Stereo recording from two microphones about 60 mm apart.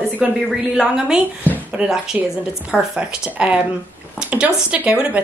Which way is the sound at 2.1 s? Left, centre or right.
Right.